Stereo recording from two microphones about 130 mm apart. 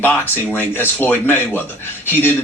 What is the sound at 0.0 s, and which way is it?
Speech, 15° left (ahead or behind).